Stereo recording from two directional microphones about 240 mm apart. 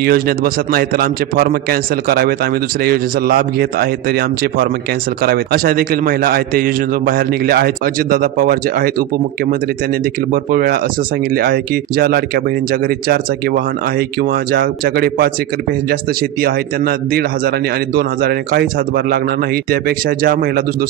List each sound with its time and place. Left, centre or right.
0.0 s a man's voice: right
10.3 s a man's voice: right